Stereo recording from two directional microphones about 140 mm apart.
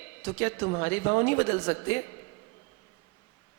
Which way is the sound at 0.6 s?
40° left (ahead or behind).